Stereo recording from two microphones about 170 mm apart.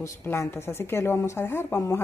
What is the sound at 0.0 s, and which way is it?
A woman's voice, 15° left (ahead or behind).